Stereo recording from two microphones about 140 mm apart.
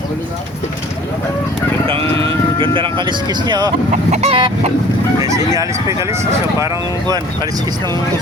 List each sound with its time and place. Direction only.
1.9 s speech: 40° right (ahead or behind)
4.1 s chicken: 45° right (ahead or behind)
5.5 s speech: 20° right (ahead or behind)